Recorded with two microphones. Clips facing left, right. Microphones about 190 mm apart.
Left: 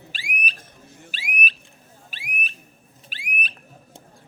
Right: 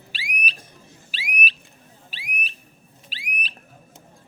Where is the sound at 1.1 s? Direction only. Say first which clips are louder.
Right 1 dB; 50° left (ahead or behind).